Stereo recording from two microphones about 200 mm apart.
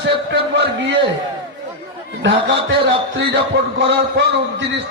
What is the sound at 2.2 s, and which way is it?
A man's voice, 65° right (ahead or behind).